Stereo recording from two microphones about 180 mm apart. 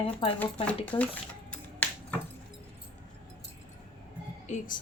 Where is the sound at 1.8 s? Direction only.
10° left (ahead or behind).